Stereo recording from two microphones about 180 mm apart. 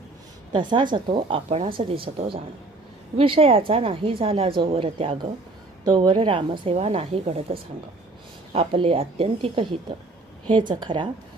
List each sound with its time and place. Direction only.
0.5 s a woman's voice: 25° right (ahead or behind)